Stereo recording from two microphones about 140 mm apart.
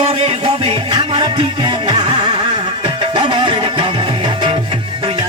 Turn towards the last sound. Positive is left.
turn(degrees=-35)  # may be behind; listen again after turning